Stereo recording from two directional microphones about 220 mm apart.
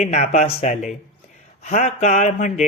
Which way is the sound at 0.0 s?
30° left (ahead or behind).